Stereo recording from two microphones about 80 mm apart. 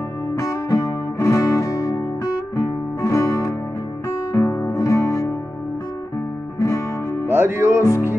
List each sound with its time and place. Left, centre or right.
0.4 s music: left
6.6 s music: left
7.2 s music: right